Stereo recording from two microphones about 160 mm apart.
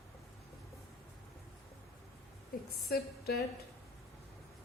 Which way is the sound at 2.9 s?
80° left.